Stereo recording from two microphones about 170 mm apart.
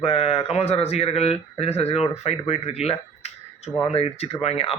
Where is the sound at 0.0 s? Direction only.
35° left (ahead or behind).